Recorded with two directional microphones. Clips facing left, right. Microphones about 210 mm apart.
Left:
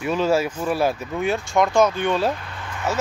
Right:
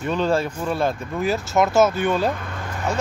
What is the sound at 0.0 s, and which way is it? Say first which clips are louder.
Speech: left 1 dB; 5° left (ahead or behind).